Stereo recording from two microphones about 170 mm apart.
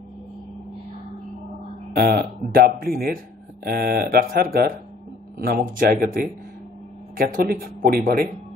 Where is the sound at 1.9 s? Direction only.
65° right (ahead or behind).